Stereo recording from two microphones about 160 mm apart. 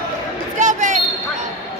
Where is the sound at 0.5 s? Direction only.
50° right (ahead or behind).